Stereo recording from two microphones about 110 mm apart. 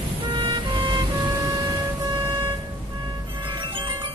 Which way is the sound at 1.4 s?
40° right (ahead or behind).